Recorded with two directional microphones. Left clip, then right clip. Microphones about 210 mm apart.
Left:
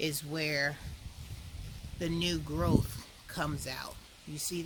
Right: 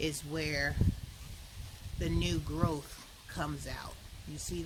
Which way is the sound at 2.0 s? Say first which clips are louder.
Left 2 dB; 20° left (ahead or behind).